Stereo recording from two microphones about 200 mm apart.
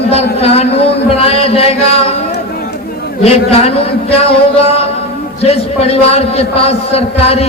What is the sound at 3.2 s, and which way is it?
A man's voice, 30° left (ahead or behind).